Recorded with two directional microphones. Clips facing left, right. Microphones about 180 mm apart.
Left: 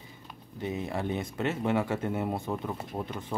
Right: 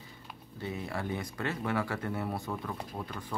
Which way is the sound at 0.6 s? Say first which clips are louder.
Left 4 dB; 20° left (ahead or behind).